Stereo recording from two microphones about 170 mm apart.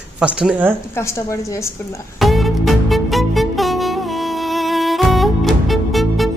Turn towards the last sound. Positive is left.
turn(degrees=0)  # may be behind; listen again after turning